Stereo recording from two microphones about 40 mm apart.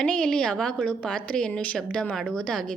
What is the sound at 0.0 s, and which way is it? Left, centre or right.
A woman's voice, centre.